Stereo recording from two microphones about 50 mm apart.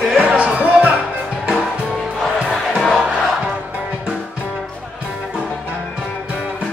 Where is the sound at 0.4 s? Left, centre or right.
Right.